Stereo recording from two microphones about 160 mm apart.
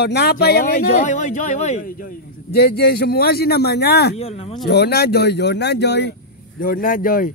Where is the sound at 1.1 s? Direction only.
50° left (ahead or behind); by 4.2 s 90° left.